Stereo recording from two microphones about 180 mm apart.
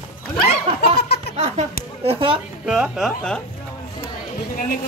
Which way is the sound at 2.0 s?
30° right (ahead or behind).